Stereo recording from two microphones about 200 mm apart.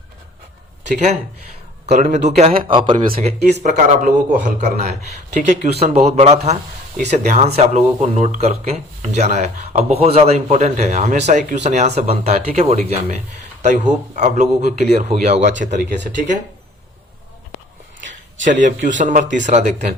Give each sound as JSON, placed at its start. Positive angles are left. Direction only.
{"t": 1.9, "sound": "speech", "side_deg": -35}
{"t": 18.4, "sound": "speech", "side_deg": -40}